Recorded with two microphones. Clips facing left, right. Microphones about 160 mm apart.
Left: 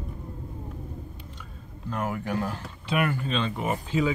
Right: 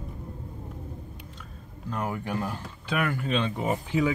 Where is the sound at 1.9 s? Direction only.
Centre (ahead or behind).